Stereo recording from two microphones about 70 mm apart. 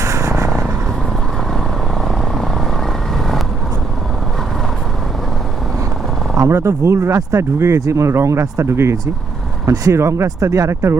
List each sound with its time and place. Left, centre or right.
0.0 s vehicle: right
6.3 s speech: right
10.2 s speech: right